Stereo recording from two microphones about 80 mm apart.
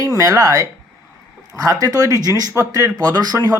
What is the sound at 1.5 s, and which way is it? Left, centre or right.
Speech, right.